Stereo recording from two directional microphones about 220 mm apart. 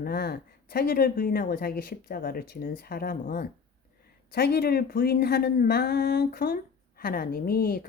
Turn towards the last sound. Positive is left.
turn(degrees=45)  # may be behind; listen again after turning